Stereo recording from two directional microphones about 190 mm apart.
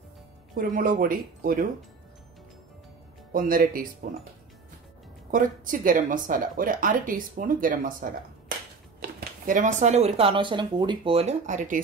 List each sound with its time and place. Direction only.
0.6 s speech: 50° right (ahead or behind)
3.3 s speech: 50° right (ahead or behind)
5.3 s speech: 45° right (ahead or behind)